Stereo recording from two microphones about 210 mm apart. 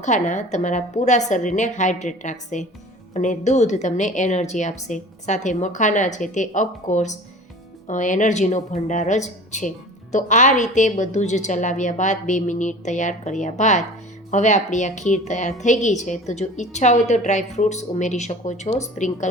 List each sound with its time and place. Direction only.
0.0 s speech: 35° left (ahead or behind)